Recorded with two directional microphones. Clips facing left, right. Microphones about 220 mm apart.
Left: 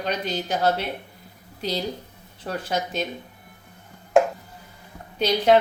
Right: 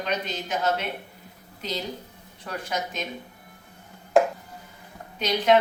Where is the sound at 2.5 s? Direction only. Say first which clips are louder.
Left 4 dB; 30° left (ahead or behind).